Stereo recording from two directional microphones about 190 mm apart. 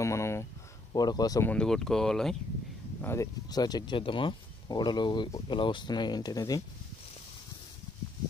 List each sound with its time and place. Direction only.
0.0 s a sound: 15° left (ahead or behind)
0.9 s speech: 20° left (ahead or behind)
1.5 s speech: 5° left (ahead or behind)
3.0 s speech: 15° left (ahead or behind)